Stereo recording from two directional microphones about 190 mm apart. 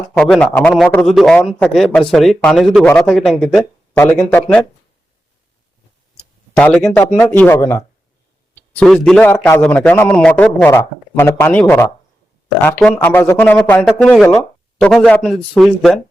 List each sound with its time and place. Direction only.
0.2 s a man's voice: 5° left (ahead or behind)
3.9 s a man's voice: 10° left (ahead or behind)
6.6 s a man's voice: 5° left (ahead or behind)